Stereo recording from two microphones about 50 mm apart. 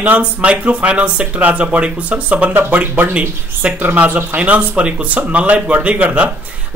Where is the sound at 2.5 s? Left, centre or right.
Right.